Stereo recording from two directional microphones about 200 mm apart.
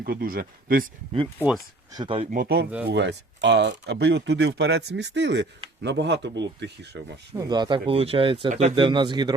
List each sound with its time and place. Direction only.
0.0 s speech: 45° right (ahead or behind)
1.9 s speech: 25° right (ahead or behind)
2.3 s speech: 50° right (ahead or behind)
2.8 s speech: 60° right (ahead or behind)
7.3 s speech: 20° right (ahead or behind)
8.7 s speech: 25° right (ahead or behind)